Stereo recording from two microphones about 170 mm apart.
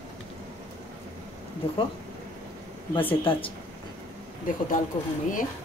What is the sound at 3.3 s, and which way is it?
Speech, 30° left (ahead or behind).